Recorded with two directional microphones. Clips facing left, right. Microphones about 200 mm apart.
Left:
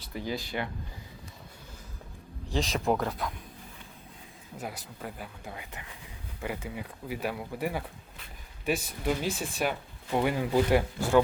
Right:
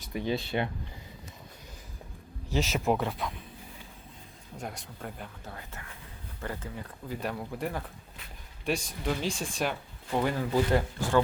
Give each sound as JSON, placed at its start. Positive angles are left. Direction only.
{"t": 0.1, "sound": "speech", "side_deg": -20}
{"t": 2.5, "sound": "speech", "side_deg": -5}
{"t": 4.5, "sound": "speech", "side_deg": 5}
{"t": 5.5, "sound": "speech", "side_deg": 15}